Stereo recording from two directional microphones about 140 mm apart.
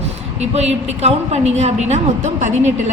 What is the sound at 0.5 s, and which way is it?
A woman's voice, 50° right (ahead or behind).